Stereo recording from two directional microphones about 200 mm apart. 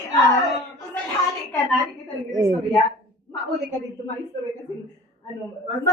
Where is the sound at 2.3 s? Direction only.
20° right (ahead or behind).